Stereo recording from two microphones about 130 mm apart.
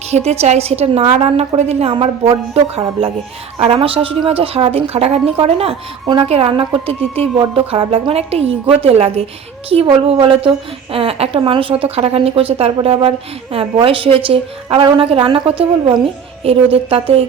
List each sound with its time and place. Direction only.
0.1 s a woman's voice: 55° right (ahead or behind)